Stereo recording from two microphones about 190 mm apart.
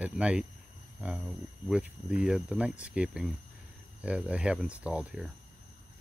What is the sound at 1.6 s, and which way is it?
Speech, 5° right (ahead or behind).